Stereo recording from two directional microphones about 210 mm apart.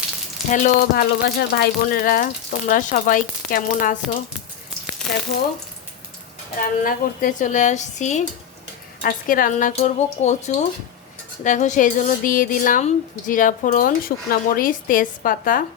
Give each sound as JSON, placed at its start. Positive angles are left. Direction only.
{"t": 0.4, "sound": "speech", "side_deg": 35}
{"t": 5.0, "sound": "a sound", "side_deg": 5}
{"t": 6.6, "sound": "speech", "side_deg": 40}